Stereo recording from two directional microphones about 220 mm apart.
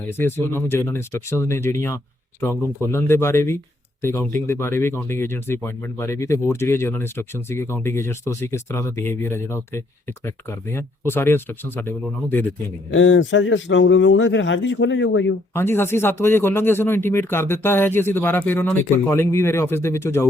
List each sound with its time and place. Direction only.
0.1 s speech: 10° left (ahead or behind)
12.9 s a man's voice: 60° left (ahead or behind)
15.5 s speech: 10° left (ahead or behind)